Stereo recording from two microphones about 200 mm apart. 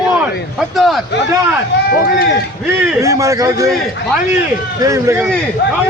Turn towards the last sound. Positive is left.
turn(degrees=-15)  # may be behind; listen again after turning